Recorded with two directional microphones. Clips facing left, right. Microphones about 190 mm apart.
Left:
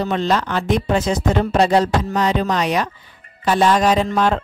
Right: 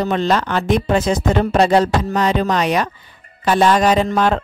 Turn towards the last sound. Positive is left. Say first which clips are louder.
# right 1 dB
turn(degrees=-60)  # may be behind; listen again after turning